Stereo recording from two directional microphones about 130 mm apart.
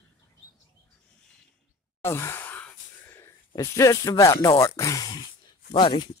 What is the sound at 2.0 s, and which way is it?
Sigh, 20° left (ahead or behind).